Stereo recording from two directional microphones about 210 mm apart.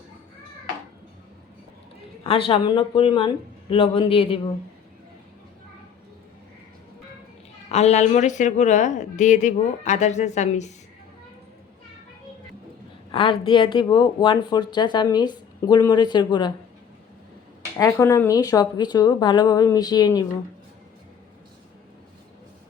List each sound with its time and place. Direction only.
2.2 s speech: 25° left (ahead or behind)
7.7 s a woman's voice: 30° left (ahead or behind)
13.1 s speech: 25° left (ahead or behind)
17.7 s speech: 15° left (ahead or behind)